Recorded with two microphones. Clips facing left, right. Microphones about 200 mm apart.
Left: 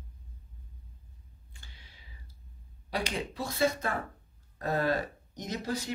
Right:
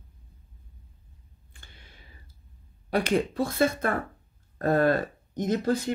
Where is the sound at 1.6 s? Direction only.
55° right (ahead or behind).